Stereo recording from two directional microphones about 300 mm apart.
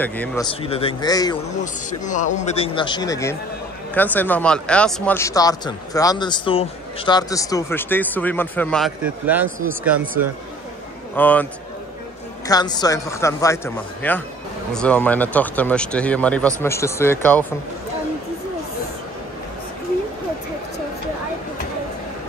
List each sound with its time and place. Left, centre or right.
0.0 s speech: centre
0.6 s speech: centre
1.6 s speech: left; by 10.0 s centre
11.1 s speech: centre
12.4 s speech: centre